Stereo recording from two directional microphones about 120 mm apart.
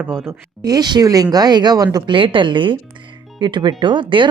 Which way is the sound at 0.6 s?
35° right (ahead or behind).